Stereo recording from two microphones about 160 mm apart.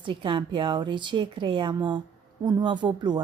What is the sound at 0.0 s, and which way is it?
Speech, 30° right (ahead or behind).